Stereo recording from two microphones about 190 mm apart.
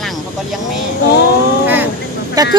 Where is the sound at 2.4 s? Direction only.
20° right (ahead or behind).